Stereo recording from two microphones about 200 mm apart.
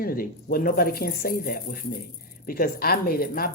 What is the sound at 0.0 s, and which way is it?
A woman's voice, 45° left (ahead or behind).